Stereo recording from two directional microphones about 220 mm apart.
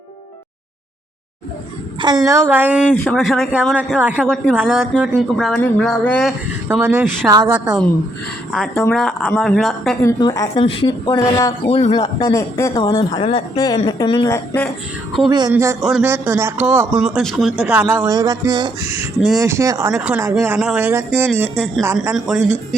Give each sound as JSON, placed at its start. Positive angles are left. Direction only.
{"t": 2.0, "sound": "a man's voice", "side_deg": -15}
{"t": 2.9, "sound": "speech", "side_deg": 5}
{"t": 6.7, "sound": "a man's voice", "side_deg": -10}
{"t": 7.5, "sound": "speech", "side_deg": -5}
{"t": 8.7, "sound": "speech", "side_deg": 10}
{"t": 10.0, "sound": "a man's voice", "side_deg": 15}
{"t": 15.3, "sound": "a man's voice", "side_deg": -20}